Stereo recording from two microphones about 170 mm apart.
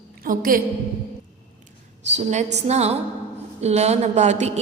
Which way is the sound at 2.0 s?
40° right (ahead or behind).